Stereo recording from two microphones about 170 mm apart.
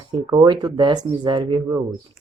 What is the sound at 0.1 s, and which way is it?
Speech, 25° right (ahead or behind).